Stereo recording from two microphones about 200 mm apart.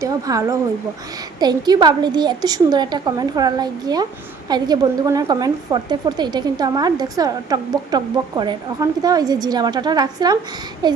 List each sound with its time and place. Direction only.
0.0 s a woman's voice: 15° right (ahead or behind)